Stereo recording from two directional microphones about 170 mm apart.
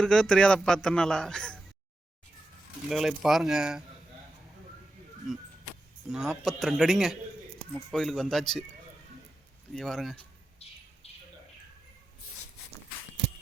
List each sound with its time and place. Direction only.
0.0 s a man's voice: 5° left (ahead or behind)
2.9 s a man's voice: centre (ahead or behind)
6.1 s a man's voice: centre (ahead or behind)
9.7 s a man's voice: centre (ahead or behind)
10.6 s bird: 35° left (ahead or behind)
11.0 s a sound: 35° left (ahead or behind)